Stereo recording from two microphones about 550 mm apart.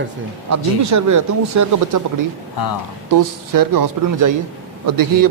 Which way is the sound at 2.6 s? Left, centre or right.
Left.